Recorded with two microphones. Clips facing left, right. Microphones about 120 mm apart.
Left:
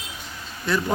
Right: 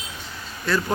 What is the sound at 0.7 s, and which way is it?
Speech, 20° left (ahead or behind).